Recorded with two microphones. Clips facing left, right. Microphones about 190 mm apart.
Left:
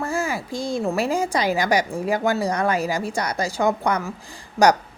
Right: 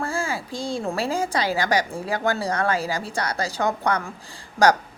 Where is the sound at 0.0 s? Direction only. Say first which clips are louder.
Left 2 dB; 15° left (ahead or behind).